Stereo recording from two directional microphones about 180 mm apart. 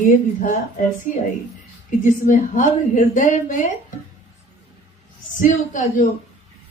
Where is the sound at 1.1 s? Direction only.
40° left (ahead or behind).